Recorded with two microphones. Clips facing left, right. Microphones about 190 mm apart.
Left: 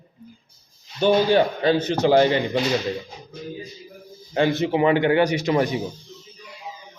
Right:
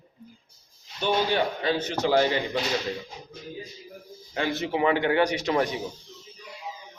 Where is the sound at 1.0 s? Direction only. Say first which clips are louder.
Left 7 dB; 35° left (ahead or behind).